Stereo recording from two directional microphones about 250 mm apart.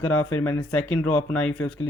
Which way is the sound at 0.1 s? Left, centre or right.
Centre.